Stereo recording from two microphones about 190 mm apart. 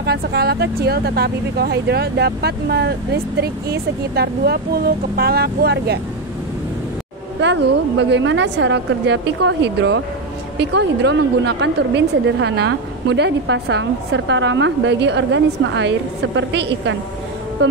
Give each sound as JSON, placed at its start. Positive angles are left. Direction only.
{"t": 0.0, "sound": "speech", "side_deg": -55}
{"t": 8.0, "sound": "a woman's voice", "side_deg": -70}